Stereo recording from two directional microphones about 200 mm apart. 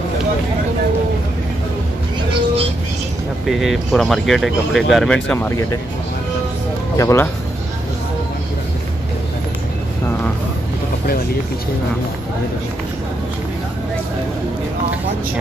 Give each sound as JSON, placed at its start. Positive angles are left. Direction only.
{"t": 3.4, "sound": "speech", "side_deg": 0}
{"t": 7.0, "sound": "speech", "side_deg": 15}